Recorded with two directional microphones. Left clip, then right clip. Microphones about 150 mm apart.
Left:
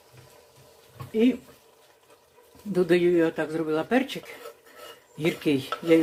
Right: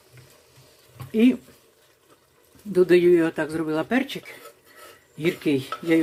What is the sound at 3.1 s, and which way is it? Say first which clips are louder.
Speech: right 2 dB; 30° right (ahead or behind).